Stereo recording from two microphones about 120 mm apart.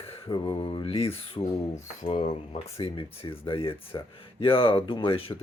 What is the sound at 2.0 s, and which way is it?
Speech, 70° left (ahead or behind).